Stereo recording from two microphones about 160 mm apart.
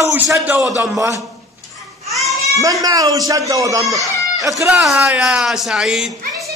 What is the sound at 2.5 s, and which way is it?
A man's voice, 20° right (ahead or behind).